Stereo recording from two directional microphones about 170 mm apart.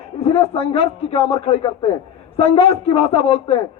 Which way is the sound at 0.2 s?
35° left (ahead or behind).